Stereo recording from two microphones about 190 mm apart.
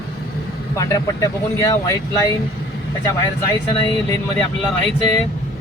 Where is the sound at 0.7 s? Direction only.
15° left (ahead or behind).